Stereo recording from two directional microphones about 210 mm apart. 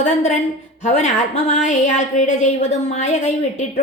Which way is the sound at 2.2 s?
35° left (ahead or behind).